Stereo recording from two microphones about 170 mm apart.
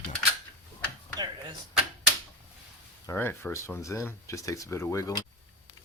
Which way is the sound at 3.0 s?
15° left (ahead or behind).